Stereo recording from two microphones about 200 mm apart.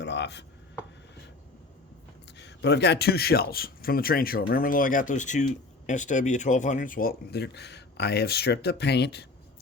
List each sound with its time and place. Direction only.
0.0 s chopping: 60° left (ahead or behind)
2.4 s a man's voice: 60° left (ahead or behind)